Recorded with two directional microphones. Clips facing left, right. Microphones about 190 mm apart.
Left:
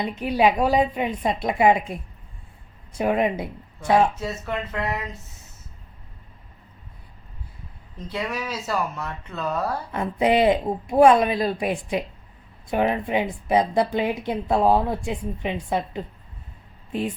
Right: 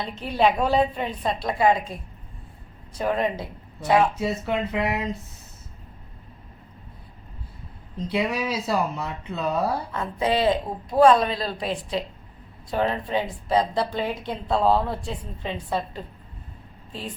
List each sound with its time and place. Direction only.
0.0 s a woman's voice: 10° left (ahead or behind)
3.0 s a woman's voice: 15° left (ahead or behind)
4.2 s speech: 15° right (ahead or behind)
8.1 s speech: 10° right (ahead or behind)
9.9 s a woman's voice: 15° left (ahead or behind)